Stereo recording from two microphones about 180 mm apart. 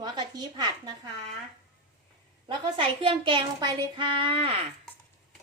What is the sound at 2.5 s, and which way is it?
A woman's voice, 25° right (ahead or behind).